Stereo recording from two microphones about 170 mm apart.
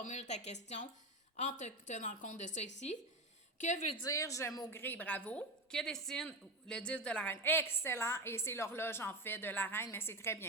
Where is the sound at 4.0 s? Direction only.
20° left (ahead or behind).